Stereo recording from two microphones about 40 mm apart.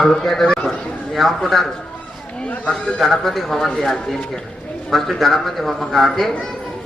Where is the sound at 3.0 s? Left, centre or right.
Centre.